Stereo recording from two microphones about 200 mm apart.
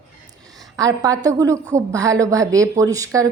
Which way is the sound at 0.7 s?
15° right (ahead or behind).